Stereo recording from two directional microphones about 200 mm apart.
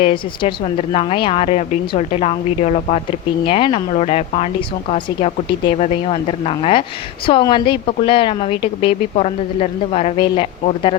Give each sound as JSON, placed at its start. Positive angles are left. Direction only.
{"t": 0.0, "sound": "a woman's voice", "side_deg": 30}